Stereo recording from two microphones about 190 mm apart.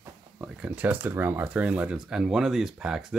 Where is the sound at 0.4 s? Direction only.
5° right (ahead or behind).